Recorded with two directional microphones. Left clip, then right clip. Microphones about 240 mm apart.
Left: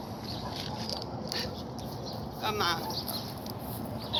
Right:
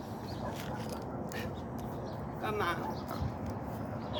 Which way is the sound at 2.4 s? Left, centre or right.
Centre.